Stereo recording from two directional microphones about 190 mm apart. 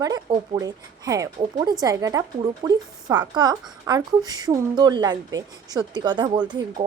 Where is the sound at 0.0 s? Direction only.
20° right (ahead or behind).